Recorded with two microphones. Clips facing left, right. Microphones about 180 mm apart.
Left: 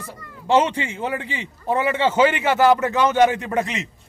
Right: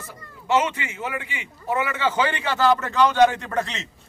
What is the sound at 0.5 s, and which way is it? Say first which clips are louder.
A man's voice: left 4 dB; 30° left (ahead or behind).